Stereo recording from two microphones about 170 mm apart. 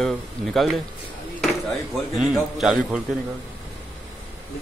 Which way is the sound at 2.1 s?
Centre (ahead or behind).